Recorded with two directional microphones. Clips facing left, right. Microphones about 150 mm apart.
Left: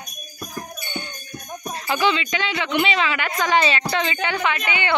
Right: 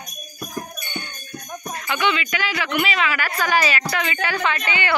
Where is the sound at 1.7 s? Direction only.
30° left (ahead or behind).